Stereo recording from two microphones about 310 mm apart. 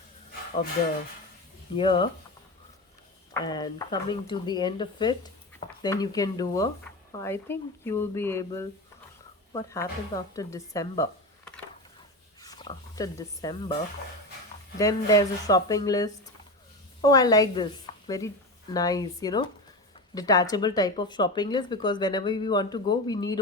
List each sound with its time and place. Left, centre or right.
1.7 s speech: centre
3.3 s speech: centre
14.8 s speech: centre
18.7 s speech: centre